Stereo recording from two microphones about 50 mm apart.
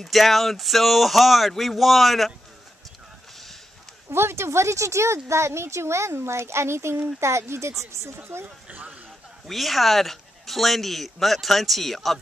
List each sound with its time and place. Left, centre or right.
0.0 s a man's voice: centre
4.1 s speech: right
8.7 s speech: right
9.5 s a man's voice: centre